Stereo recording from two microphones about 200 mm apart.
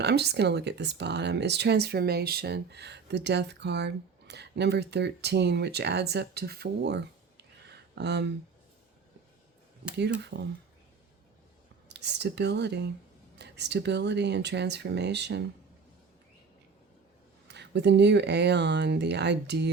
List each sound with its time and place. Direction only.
0.0 s speech: 55° right (ahead or behind)
7.7 s a sound: 60° right (ahead or behind)
10.2 s speech: 60° right (ahead or behind)
11.9 s speech: 60° right (ahead or behind)
17.5 s speech: 60° right (ahead or behind)